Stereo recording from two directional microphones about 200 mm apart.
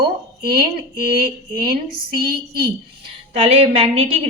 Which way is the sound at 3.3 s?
30° right (ahead or behind).